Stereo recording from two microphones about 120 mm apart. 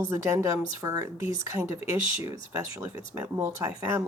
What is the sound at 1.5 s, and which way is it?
Speech, 25° right (ahead or behind).